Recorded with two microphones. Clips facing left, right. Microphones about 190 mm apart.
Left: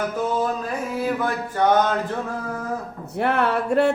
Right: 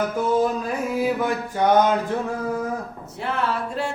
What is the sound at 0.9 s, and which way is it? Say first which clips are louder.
Mantra: right 1 dB; 10° right (ahead or behind).